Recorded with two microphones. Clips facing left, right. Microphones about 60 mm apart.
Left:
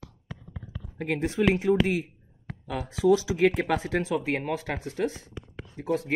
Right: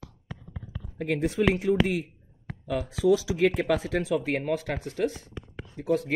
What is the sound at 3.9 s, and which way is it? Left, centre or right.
Speech, centre.